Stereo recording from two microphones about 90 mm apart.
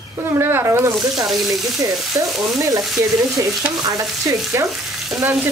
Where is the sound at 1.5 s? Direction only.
40° right (ahead or behind).